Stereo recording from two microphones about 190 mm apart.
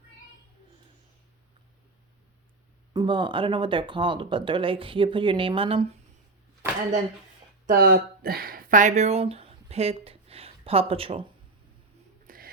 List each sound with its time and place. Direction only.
2.9 s speech: 25° right (ahead or behind)
7.7 s speech: 50° right (ahead or behind); by 11.3 s 30° right (ahead or behind)
12.3 s whispering: 50° right (ahead or behind)